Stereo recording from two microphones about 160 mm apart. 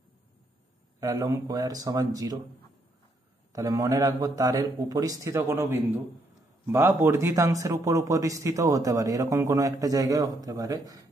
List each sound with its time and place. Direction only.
1.0 s a man's voice: 20° right (ahead or behind)
3.5 s a man's voice: 20° right (ahead or behind)